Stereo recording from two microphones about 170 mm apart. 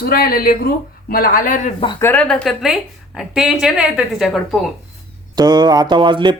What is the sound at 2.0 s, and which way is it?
A woman's voice, 10° left (ahead or behind).